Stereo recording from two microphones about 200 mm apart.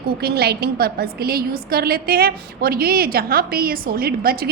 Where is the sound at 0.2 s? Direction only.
50° right (ahead or behind).